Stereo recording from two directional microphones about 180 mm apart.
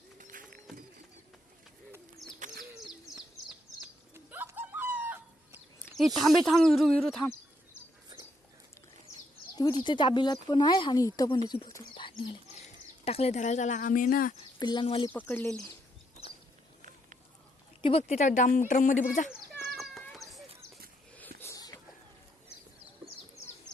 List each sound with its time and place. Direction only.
0.2 s a sound: 50° right (ahead or behind)
2.2 s bird: centre (ahead or behind)
4.1 s chicken: 15° right (ahead or behind)
6.1 s speech: centre (ahead or behind)
9.6 s speech: 25° left (ahead or behind)
13.1 s speech: 35° left (ahead or behind); by 14.3 s 50° left (ahead or behind)
14.6 s speech: 25° left (ahead or behind)
15.1 s speech: 10° left (ahead or behind)
17.8 s speech: 35° left (ahead or behind)
19.5 s horse: centre (ahead or behind)
21.2 s a sound: 15° left (ahead or behind)